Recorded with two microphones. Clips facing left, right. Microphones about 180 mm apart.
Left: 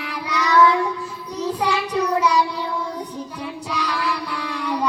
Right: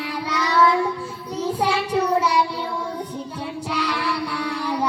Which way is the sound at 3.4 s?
30° right (ahead or behind).